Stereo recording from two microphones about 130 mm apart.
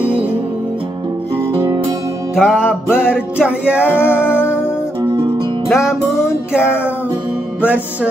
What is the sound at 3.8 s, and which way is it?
Music, 15° left (ahead or behind).